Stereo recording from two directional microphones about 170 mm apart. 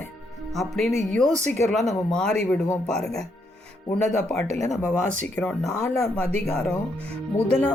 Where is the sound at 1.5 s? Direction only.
5° left (ahead or behind).